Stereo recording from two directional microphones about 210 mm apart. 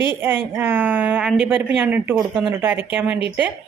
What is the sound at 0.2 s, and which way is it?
A woman's voice, 10° right (ahead or behind).